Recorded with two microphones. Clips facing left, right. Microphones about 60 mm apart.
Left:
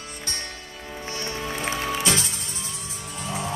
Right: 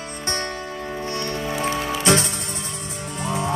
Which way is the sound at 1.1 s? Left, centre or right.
Right.